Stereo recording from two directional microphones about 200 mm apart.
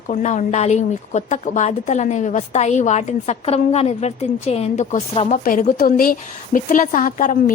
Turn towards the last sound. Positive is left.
turn(degrees=40)  # may be behind; listen again after turning